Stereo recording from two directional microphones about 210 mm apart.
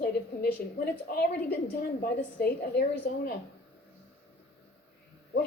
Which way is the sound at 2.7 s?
45° left (ahead or behind).